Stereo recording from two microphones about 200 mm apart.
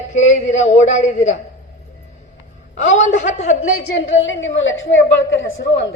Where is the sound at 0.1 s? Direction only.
35° left (ahead or behind).